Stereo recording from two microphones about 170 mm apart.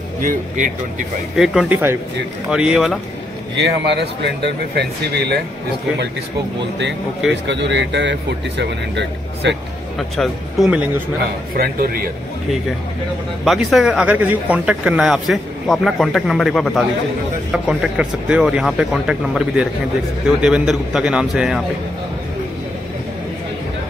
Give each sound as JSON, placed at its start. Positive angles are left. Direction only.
{"t": 0.2, "sound": "speech", "side_deg": -50}
{"t": 1.3, "sound": "speech", "side_deg": -5}
{"t": 3.5, "sound": "speech", "side_deg": -90}
{"t": 7.4, "sound": "speech", "side_deg": -90}
{"t": 9.9, "sound": "speech", "side_deg": 0}
{"t": 11.5, "sound": "speech", "side_deg": -60}
{"t": 13.4, "sound": "speech", "side_deg": 0}